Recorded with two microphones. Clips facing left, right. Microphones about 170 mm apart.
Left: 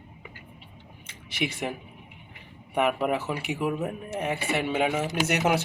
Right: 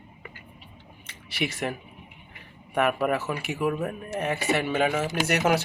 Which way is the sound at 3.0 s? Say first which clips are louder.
Right 1 dB; 20° left (ahead or behind).